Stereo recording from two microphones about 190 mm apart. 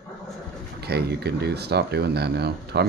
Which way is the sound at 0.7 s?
55° right (ahead or behind).